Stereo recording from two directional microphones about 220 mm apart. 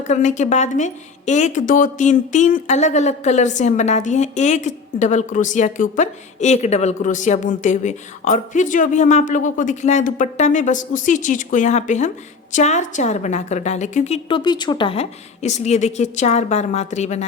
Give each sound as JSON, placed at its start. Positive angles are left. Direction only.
{"t": 0.0, "sound": "a woman's voice", "side_deg": 35}